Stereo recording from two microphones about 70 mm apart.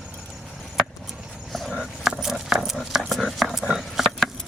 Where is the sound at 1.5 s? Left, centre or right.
Centre.